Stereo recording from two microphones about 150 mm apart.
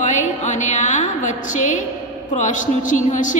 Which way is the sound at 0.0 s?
55° left (ahead or behind).